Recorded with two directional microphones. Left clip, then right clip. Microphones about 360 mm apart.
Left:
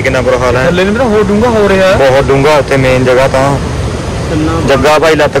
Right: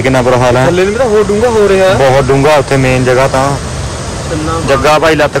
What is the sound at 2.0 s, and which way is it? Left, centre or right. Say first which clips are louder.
A man's voice: left 1 dB; centre.